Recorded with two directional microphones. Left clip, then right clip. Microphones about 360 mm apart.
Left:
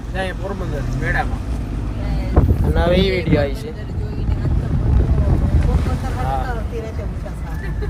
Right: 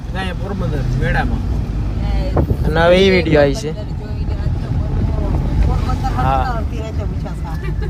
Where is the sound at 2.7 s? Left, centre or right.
Right.